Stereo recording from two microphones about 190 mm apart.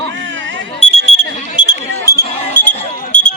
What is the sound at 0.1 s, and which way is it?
Alarm clock, 75° right (ahead or behind).